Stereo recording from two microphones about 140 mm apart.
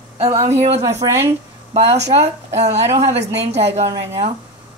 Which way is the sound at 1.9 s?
55° right (ahead or behind).